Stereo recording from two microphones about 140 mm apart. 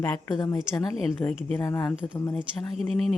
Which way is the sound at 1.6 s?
20° left (ahead or behind).